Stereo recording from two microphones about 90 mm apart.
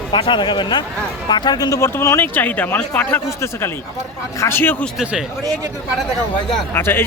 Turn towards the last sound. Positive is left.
turn(degrees=25)  # may be behind; listen again after turning